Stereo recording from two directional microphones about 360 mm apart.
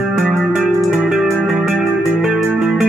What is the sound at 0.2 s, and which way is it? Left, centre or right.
Music, centre.